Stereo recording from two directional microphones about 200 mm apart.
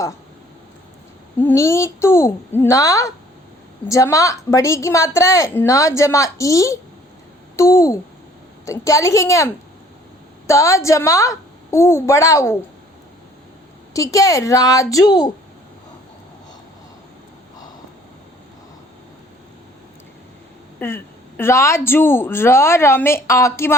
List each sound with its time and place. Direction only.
1.4 s a woman's voice: 10° left (ahead or behind)
13.9 s a woman's voice: 15° left (ahead or behind)
20.7 s a woman's voice: 10° left (ahead or behind)